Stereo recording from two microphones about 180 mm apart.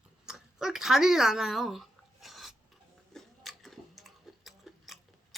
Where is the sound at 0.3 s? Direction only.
5° right (ahead or behind).